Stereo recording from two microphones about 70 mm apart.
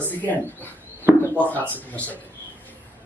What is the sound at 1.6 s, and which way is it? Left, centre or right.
Speech, right.